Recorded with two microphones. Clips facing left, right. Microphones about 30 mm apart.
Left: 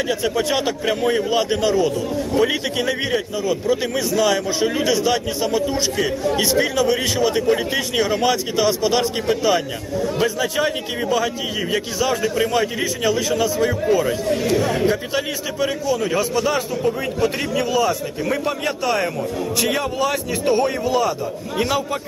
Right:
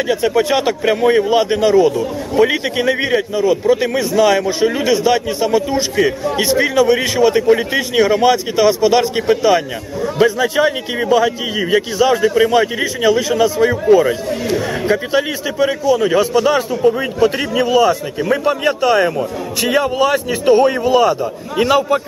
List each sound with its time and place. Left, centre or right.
0.1 s a man's voice: centre